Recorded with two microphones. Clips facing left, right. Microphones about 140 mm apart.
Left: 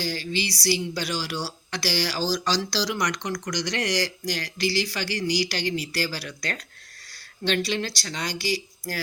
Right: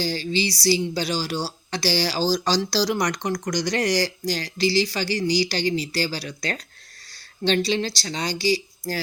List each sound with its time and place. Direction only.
0.0 s a woman's voice: 30° right (ahead or behind)